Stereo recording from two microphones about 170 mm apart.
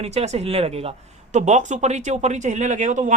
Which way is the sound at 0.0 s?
40° right (ahead or behind).